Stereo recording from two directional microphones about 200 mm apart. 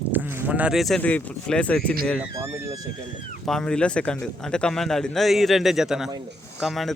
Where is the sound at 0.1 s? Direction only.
10° right (ahead or behind).